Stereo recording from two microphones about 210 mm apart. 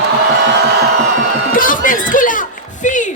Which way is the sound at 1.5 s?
40° left (ahead or behind).